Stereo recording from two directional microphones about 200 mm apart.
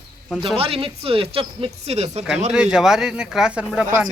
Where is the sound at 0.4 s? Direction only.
30° right (ahead or behind).